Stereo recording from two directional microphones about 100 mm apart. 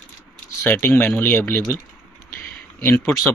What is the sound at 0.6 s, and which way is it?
Speech, 20° left (ahead or behind).